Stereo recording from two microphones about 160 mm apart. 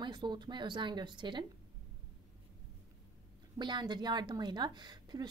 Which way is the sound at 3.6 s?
30° right (ahead or behind).